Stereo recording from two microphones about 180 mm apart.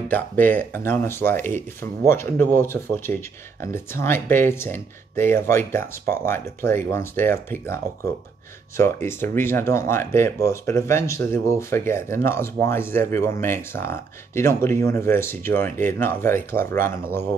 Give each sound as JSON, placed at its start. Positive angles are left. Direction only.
{"t": 0.1, "sound": "speech", "side_deg": 10}